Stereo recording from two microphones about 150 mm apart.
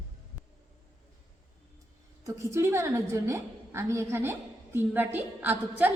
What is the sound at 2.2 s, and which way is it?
A woman's voice, 20° right (ahead or behind).